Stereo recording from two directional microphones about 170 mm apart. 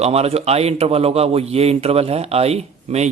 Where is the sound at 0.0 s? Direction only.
35° right (ahead or behind).